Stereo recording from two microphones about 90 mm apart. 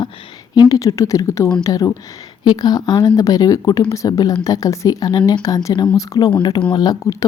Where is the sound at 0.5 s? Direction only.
40° left (ahead or behind).